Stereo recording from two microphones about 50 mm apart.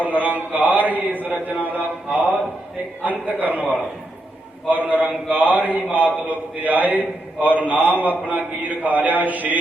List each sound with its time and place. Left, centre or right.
0.0 s a man's voice: right
4.7 s a man's voice: right